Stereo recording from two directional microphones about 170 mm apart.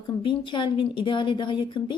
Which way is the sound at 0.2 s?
30° left (ahead or behind).